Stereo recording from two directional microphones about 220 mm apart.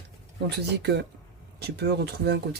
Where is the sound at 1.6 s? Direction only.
50° right (ahead or behind).